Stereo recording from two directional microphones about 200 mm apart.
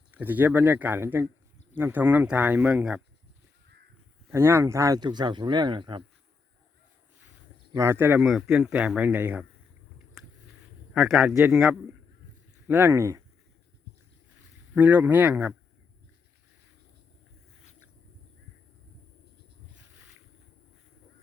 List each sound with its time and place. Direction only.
0.1 s speech: 10° right (ahead or behind)
4.3 s speech: 10° right (ahead or behind)
7.7 s speech: 15° right (ahead or behind)
10.2 s a sound: centre (ahead or behind)
10.9 s a man's voice: 5° right (ahead or behind)
14.8 s speech: 10° right (ahead or behind)